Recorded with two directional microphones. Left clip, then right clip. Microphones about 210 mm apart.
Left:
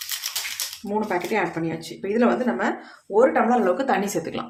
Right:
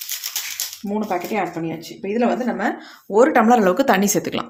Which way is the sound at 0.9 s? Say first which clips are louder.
Right 1 dB; 20° right (ahead or behind).